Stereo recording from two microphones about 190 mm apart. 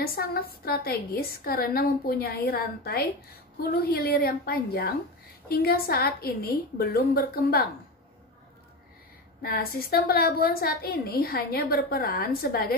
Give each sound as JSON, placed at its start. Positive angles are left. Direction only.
{"t": 0.0, "sound": "a woman's voice", "side_deg": 50}
{"t": 9.4, "sound": "a woman's voice", "side_deg": 50}